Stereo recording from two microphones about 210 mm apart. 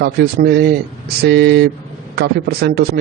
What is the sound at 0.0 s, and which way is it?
A man's voice, 50° right (ahead or behind).